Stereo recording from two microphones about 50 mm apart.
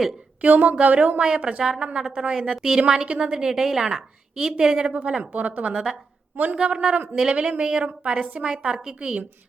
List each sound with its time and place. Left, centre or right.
0.4 s a woman's voice: right
1.2 s a woman's voice: centre
5.3 s a woman's voice: right
6.6 s a woman's voice: centre